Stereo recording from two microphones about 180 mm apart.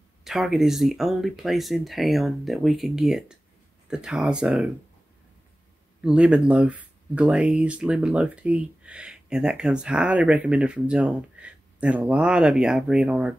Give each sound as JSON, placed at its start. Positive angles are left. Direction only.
{"t": 0.2, "sound": "speech", "side_deg": 0}
{"t": 5.9, "sound": "speech", "side_deg": -5}